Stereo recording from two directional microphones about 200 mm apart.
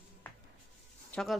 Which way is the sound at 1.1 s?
Centre (ahead or behind).